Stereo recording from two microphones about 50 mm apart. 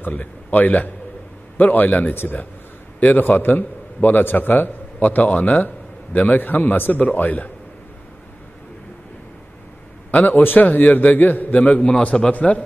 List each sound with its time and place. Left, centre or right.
0.0 s a man's voice: left
10.1 s a man's voice: left